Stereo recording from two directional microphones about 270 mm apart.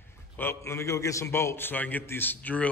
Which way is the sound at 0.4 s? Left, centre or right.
Centre.